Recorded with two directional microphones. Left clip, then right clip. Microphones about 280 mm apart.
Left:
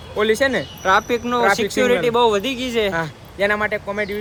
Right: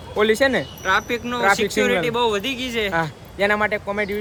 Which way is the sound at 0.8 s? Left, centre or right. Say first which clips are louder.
Left 5 dB; centre.